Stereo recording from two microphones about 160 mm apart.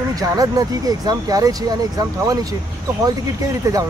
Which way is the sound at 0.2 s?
25° right (ahead or behind).